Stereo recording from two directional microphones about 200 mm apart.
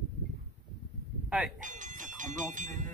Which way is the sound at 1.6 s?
40° right (ahead or behind).